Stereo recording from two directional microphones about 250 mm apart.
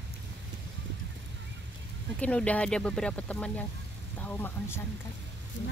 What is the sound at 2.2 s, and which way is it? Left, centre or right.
Speech, centre.